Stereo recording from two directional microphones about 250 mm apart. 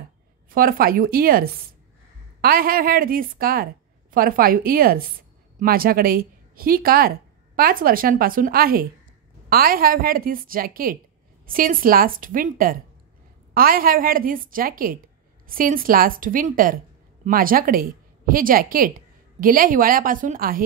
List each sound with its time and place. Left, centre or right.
0.5 s a woman's voice: right